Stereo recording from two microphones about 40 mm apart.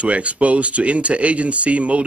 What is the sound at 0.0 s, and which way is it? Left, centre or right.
Speech, right.